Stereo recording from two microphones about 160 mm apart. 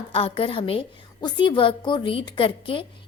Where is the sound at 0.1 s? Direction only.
35° left (ahead or behind).